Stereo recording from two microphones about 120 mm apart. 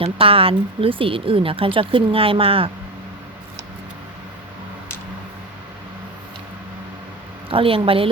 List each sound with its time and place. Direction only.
0.0 s speech: 50° right (ahead or behind)
7.5 s speech: 50° right (ahead or behind)